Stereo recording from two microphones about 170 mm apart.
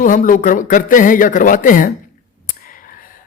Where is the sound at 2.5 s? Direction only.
55° left (ahead or behind).